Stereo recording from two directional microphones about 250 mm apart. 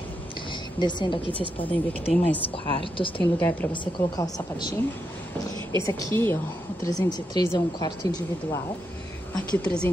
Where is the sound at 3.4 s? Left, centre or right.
Centre.